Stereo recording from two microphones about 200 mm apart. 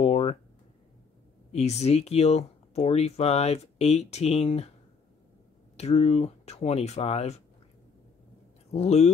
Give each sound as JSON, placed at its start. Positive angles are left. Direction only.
{"t": 0.0, "sound": "a sound", "side_deg": 30}
{"t": 1.5, "sound": "speech", "side_deg": 35}
{"t": 5.8, "sound": "speech", "side_deg": 30}
{"t": 8.7, "sound": "speech", "side_deg": 30}